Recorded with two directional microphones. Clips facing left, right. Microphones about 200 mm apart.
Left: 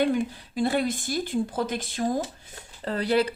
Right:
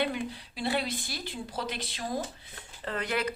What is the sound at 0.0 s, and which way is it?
Speech, 45° left (ahead or behind).